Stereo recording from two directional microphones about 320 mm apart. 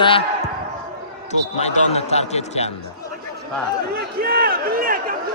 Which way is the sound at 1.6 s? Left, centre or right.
Centre.